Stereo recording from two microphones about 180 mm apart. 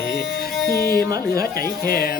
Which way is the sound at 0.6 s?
60° left (ahead or behind).